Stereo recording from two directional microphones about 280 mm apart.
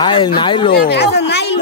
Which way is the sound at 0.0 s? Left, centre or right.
Centre.